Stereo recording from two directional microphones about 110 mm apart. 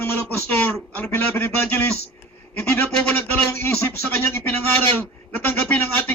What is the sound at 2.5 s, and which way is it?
A man's voice, 15° left (ahead or behind).